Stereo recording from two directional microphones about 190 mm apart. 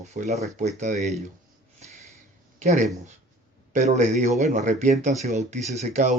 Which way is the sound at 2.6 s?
40° right (ahead or behind).